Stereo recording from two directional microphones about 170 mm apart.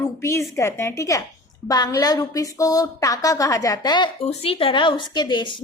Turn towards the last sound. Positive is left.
turn(degrees=25)  # may be behind; listen again after turning